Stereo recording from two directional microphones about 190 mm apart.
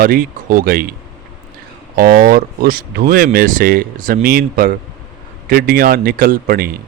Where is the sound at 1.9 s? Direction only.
50° right (ahead or behind).